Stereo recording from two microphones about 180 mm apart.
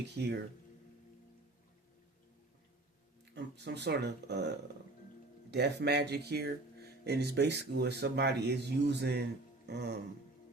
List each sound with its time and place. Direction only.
0.1 s speech: 70° right (ahead or behind)
3.3 s speech: 70° right (ahead or behind)